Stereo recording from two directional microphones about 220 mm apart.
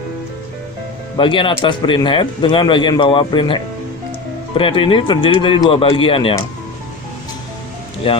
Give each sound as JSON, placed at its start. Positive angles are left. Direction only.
{"t": 1.1, "sound": "speech", "side_deg": 20}
{"t": 8.1, "sound": "speech", "side_deg": 25}